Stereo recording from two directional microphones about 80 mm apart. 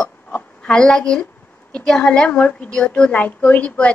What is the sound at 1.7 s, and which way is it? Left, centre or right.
A woman's voice, centre.